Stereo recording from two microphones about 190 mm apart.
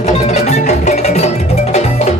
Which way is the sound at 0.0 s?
35° left (ahead or behind).